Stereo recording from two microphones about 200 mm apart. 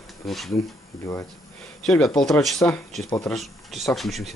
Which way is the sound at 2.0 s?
15° left (ahead or behind).